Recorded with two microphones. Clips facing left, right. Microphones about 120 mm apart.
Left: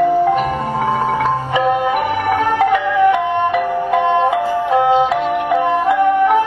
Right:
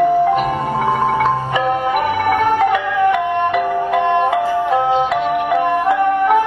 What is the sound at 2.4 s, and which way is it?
Music, 15° right (ahead or behind).